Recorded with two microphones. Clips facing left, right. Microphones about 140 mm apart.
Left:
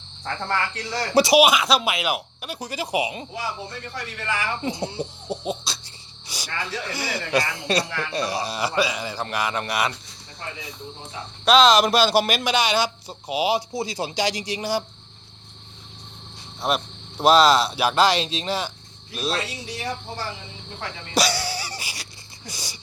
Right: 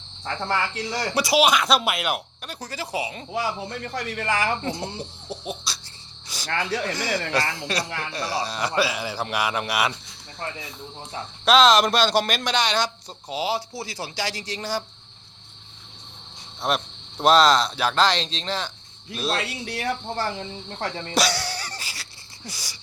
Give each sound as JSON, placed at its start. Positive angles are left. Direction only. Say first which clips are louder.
{"t": 0.3, "sound": "a man's voice", "louder": "even", "side_deg": -10}
{"t": 1.1, "sound": "speech", "louder": "left 7 dB", "side_deg": 25}
{"t": 1.4, "sound": "speech", "louder": "left 2 dB", "side_deg": 5}
{"t": 2.6, "sound": "speech", "louder": "left 4 dB", "side_deg": 15}
{"t": 3.9, "sound": "speech", "louder": "right 4 dB", "side_deg": -50}
{"t": 4.6, "sound": "speech", "louder": "left 2 dB", "side_deg": 20}
{"t": 6.2, "sound": "cricket", "louder": "even", "side_deg": 10}
{"t": 6.9, "sound": "speech", "louder": "left 1 dB", "side_deg": 10}
{"t": 7.7, "sound": "a man's voice", "louder": "left 4 dB", "side_deg": 25}
{"t": 11.4, "sound": "speech", "louder": "left 1 dB", "side_deg": 0}
{"t": 16.6, "sound": "speech", "louder": "left 1 dB", "side_deg": 0}
{"t": 19.6, "sound": "speech", "louder": "right 3 dB", "side_deg": -60}
{"t": 21.2, "sound": "a sound", "louder": "left 2 dB", "side_deg": 0}
{"t": 22.4, "sound": "speech", "louder": "left 2 dB", "side_deg": 25}